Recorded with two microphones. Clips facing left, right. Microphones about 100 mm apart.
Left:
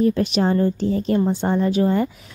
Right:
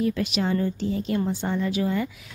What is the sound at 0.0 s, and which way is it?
Speech, 35° left (ahead or behind).